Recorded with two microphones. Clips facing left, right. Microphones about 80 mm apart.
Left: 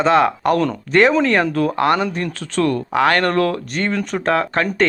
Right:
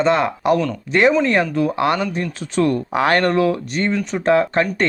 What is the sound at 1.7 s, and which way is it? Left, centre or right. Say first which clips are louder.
Speech: left 3 dB; left.